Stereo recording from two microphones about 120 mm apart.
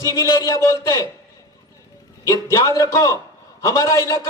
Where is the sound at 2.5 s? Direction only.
25° left (ahead or behind).